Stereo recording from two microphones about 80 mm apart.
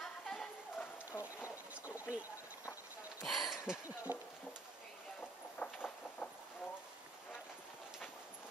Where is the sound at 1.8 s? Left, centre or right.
Centre.